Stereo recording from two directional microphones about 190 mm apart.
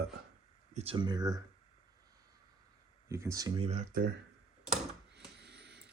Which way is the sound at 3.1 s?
15° right (ahead or behind).